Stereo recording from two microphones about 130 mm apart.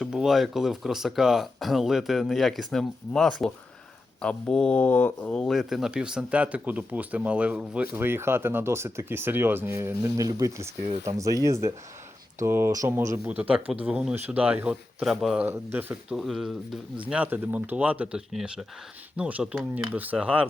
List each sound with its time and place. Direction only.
0.0 s speech: 5° right (ahead or behind); by 13.1 s 25° right (ahead or behind)
13.2 s speech: 10° right (ahead or behind)
15.4 s speech: 15° right (ahead or behind)
16.1 s speech: centre (ahead or behind)
17.1 s speech: 10° right (ahead or behind)